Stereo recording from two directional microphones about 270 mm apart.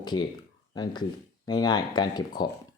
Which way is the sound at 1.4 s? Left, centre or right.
Centre.